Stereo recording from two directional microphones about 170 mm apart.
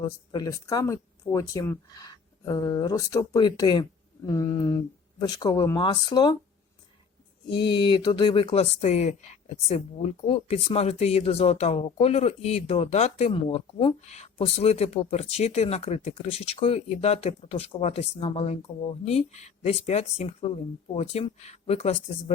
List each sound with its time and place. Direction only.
0.3 s speech: 20° left (ahead or behind)
7.5 s speech: 30° left (ahead or behind)
13.3 s speech: 30° left (ahead or behind)